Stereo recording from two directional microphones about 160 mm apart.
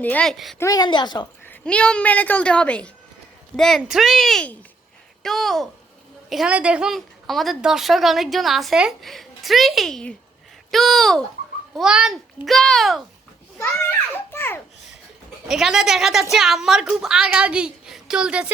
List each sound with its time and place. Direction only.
0.0 s speech: 10° left (ahead or behind)
0.6 s a woman's voice: 25° left (ahead or behind)
1.5 s a woman's voice: 5° left (ahead or behind)
13.6 s a woman's voice: 15° left (ahead or behind)
15.4 s speech: centre (ahead or behind)